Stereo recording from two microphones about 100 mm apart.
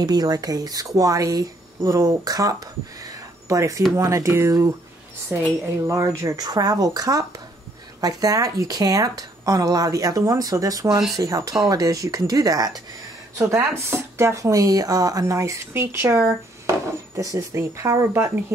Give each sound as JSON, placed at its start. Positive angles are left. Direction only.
{"t": 0.0, "sound": "a woman's voice", "side_deg": -40}